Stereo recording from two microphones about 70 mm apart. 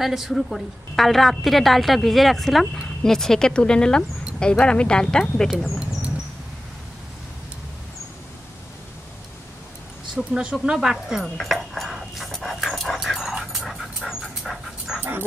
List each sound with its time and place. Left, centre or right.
0.0 s a woman's voice: centre
10.1 s speech: centre
11.3 s dog: centre
15.0 s dog: right